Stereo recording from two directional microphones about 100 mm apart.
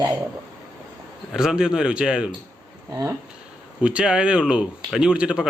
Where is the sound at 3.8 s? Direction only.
10° right (ahead or behind).